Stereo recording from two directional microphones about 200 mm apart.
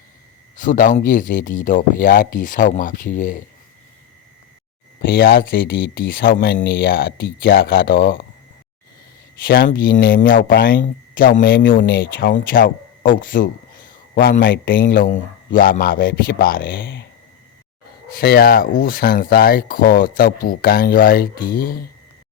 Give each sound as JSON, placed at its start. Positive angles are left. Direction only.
{"t": 0.5, "sound": "speech", "side_deg": 40}
{"t": 4.9, "sound": "speech", "side_deg": 45}
{"t": 9.4, "sound": "a man's voice", "side_deg": 45}
{"t": 14.4, "sound": "a man's voice", "side_deg": 65}
{"t": 14.7, "sound": "speech", "side_deg": 45}
{"t": 16.6, "sound": "speech", "side_deg": 65}
{"t": 18.2, "sound": "speech", "side_deg": 50}